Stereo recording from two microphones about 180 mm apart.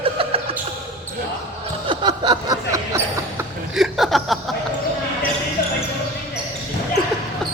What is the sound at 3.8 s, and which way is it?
Chuckle, centre (ahead or behind).